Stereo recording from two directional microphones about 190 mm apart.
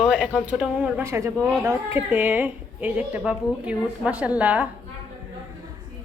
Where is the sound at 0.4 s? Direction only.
5° right (ahead or behind).